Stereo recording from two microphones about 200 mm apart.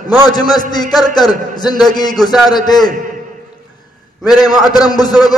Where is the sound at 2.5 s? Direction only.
20° left (ahead or behind).